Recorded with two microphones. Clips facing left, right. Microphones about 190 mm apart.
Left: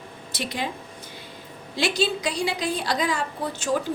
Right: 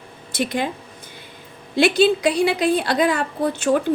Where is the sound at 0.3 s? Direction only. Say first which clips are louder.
Right 7 dB; 55° right (ahead or behind).